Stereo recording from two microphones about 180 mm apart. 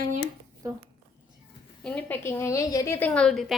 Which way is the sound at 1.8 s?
10° left (ahead or behind).